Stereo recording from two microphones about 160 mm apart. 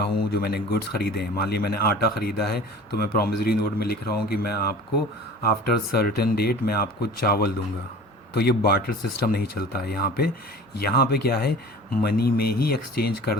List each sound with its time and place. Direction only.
0.0 s speech: 80° left